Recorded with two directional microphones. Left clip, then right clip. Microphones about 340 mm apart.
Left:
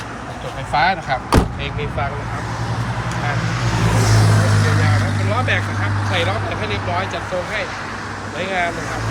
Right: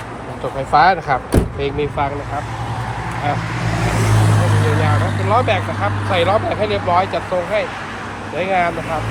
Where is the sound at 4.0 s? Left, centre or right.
Right.